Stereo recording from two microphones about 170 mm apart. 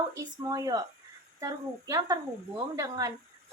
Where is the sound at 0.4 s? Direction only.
20° right (ahead or behind).